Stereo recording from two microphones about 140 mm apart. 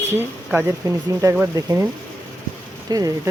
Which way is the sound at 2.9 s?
25° right (ahead or behind).